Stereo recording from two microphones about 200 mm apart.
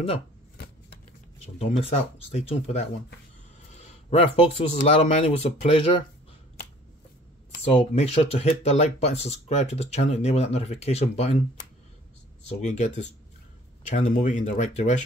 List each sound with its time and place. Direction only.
1.6 s speech: 35° left (ahead or behind)
7.6 s speech: 30° left (ahead or behind)
12.4 s speech: 35° left (ahead or behind)